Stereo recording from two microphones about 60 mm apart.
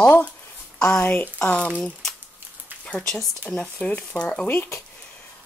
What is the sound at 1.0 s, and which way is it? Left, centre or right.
Speech, left.